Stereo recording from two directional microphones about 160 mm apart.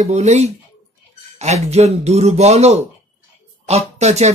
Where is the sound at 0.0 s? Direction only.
45° right (ahead or behind).